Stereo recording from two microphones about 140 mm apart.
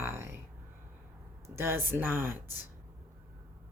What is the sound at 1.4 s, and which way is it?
Speech, 20° right (ahead or behind).